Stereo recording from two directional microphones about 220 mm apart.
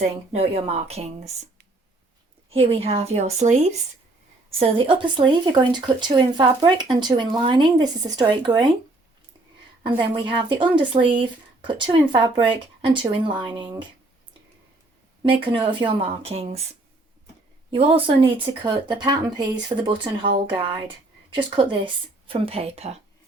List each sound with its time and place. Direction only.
0.9 s speech: 30° right (ahead or behind)
2.5 s speech: 25° right (ahead or behind)
9.8 s speech: 20° right (ahead or behind)
15.2 s speech: 20° right (ahead or behind)
17.7 s speech: 25° right (ahead or behind)